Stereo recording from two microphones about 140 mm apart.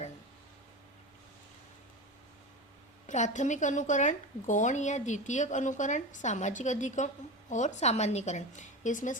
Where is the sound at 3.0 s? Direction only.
55° left (ahead or behind).